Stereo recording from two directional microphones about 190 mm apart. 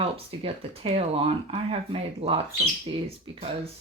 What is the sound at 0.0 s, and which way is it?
Speech, 30° right (ahead or behind).